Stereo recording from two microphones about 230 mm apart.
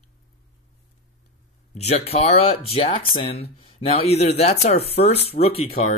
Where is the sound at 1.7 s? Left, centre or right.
Left.